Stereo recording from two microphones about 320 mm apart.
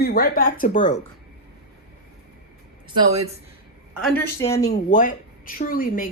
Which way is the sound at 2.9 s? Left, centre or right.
Centre.